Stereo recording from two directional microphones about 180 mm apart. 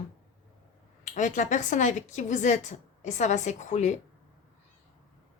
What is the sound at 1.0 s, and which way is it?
A woman's voice, 45° left (ahead or behind).